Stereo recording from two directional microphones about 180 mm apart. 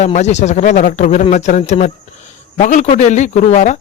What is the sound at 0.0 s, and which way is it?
A man's voice, 40° left (ahead or behind).